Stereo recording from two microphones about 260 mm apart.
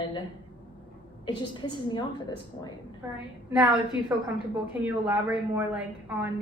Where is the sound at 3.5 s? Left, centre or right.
Centre.